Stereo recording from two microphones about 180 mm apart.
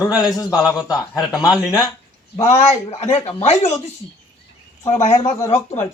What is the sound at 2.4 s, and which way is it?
Speech, 35° left (ahead or behind).